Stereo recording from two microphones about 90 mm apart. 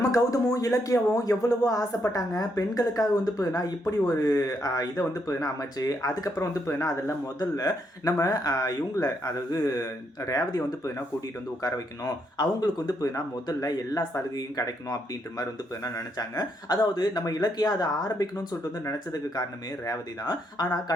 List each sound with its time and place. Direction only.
0.0 s speech: 40° left (ahead or behind)
7.3 s speech: 45° left (ahead or behind)
20.2 s speech: 50° left (ahead or behind)